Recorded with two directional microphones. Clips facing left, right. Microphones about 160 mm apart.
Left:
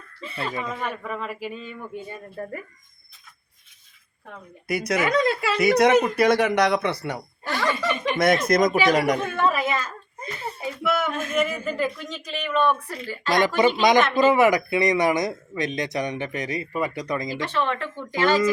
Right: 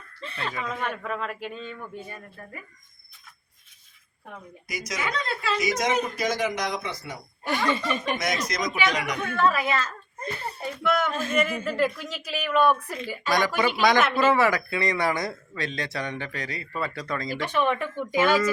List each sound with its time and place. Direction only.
0.2 s speech: 5° left (ahead or behind)
4.7 s speech: 60° left (ahead or behind)
8.2 s speech: 55° left (ahead or behind)
9.2 s a child's voice: 20° left (ahead or behind)
11.1 s a sound: 30° right (ahead or behind)
11.3 s speech: centre (ahead or behind)
13.6 s speech: 20° left (ahead or behind)
17.4 s speech: 15° right (ahead or behind)